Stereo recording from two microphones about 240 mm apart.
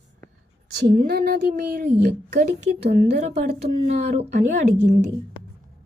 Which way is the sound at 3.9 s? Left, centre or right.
Right.